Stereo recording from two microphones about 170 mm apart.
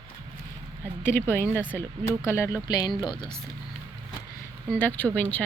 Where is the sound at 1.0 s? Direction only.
15° left (ahead or behind).